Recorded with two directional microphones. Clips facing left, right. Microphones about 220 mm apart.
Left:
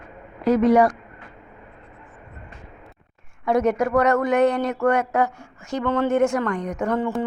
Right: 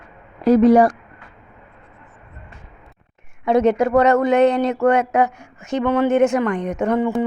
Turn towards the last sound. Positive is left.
turn(degrees=-20)  # may be behind; listen again after turning